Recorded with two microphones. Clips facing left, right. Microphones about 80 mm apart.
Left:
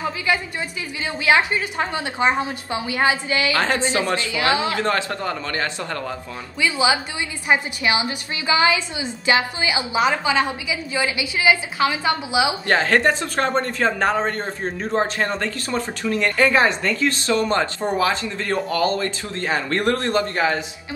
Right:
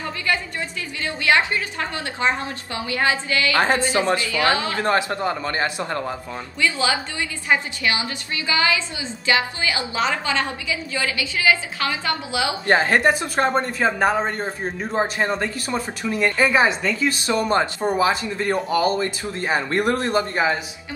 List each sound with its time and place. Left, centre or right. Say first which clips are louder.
1.0 s a woman's voice: left 1 dB; centre
3.5 s a man's voice: right 4 dB; right
6.6 s a woman's voice: left 2 dB; centre
12.6 s speech: right 3 dB; centre